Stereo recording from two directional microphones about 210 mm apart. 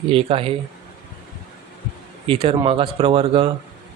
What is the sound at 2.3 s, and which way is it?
Speech, 25° right (ahead or behind).